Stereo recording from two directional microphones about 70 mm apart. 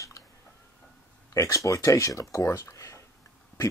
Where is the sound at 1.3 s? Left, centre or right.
Left.